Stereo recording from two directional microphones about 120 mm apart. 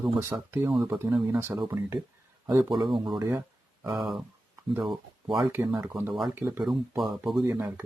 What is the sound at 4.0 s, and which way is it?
Speech, centre (ahead or behind).